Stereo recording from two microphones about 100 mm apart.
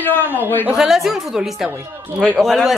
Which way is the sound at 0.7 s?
5° right (ahead or behind).